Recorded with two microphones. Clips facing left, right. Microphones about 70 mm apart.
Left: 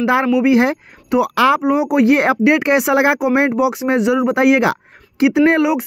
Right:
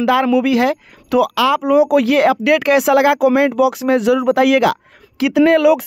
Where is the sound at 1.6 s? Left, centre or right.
Centre.